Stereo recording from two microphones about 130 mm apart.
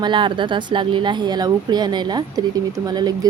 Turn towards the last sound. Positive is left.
turn(degrees=-30)  # may be behind; listen again after turning